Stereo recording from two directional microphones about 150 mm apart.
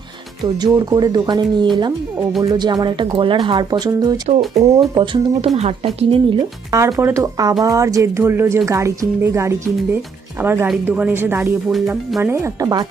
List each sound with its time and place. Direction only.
0.4 s speech: 25° right (ahead or behind)
5.5 s speech: 45° right (ahead or behind)
6.7 s speech: 20° right (ahead or behind)
11.7 s speech: centre (ahead or behind)
12.2 s speech: 15° right (ahead or behind)